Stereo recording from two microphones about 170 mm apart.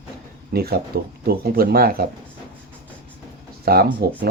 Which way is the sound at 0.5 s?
65° right (ahead or behind).